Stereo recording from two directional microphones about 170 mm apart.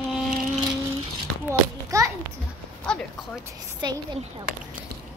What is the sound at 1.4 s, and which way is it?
Speech, 20° right (ahead or behind).